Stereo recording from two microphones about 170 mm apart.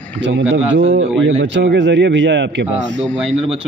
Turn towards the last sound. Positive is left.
turn(degrees=0)  # may be behind; listen again after turning